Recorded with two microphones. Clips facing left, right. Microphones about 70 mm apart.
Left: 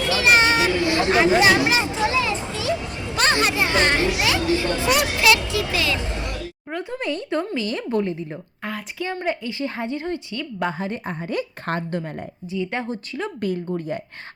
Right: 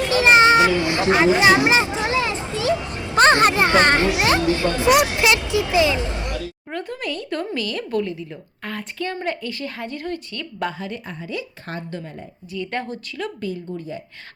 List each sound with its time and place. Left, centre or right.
0.1 s a sound: right
4.9 s speech: right
6.9 s a woman's voice: left
8.6 s a woman's voice: centre
10.7 s a woman's voice: left
12.5 s a woman's voice: left
13.4 s speech: left